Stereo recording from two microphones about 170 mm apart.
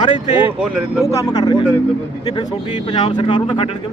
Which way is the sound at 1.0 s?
20° left (ahead or behind).